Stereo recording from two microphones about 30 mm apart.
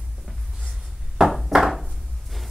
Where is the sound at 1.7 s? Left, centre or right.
Centre.